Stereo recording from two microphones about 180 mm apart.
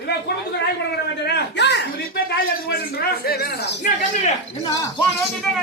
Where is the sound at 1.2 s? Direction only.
65° left (ahead or behind).